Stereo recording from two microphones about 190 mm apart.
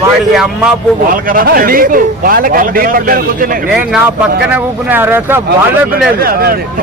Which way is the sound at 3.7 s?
5° right (ahead or behind).